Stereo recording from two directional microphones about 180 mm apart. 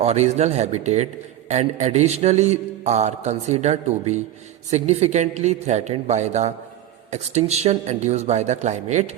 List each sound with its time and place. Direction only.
0.0 s a man's voice: 40° right (ahead or behind)